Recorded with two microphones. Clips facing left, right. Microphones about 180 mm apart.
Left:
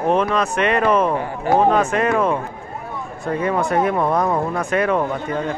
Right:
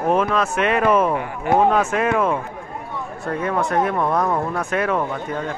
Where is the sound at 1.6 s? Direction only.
5° right (ahead or behind).